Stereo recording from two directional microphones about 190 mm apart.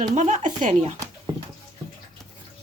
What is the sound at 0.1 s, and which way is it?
Speech, 40° right (ahead or behind).